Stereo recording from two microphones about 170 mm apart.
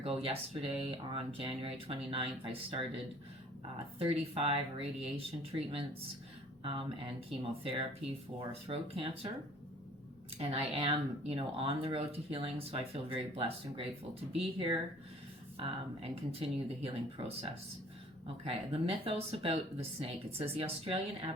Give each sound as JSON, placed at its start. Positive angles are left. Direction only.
{"t": 0.0, "sound": "speech", "side_deg": -35}
{"t": 10.3, "sound": "speech", "side_deg": -35}
{"t": 18.4, "sound": "speech", "side_deg": -35}